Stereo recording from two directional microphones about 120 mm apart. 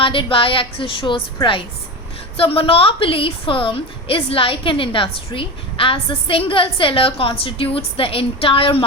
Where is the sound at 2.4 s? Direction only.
50° left (ahead or behind).